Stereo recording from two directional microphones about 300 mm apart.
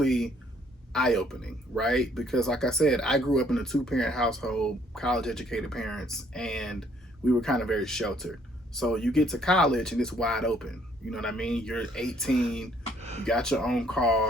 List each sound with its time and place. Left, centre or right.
0.0 s speech: centre
13.0 s a sound: right
13.2 s speech: centre